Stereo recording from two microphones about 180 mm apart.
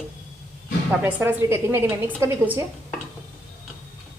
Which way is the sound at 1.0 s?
10° right (ahead or behind).